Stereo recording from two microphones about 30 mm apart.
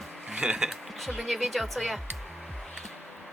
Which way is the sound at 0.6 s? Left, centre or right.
Centre.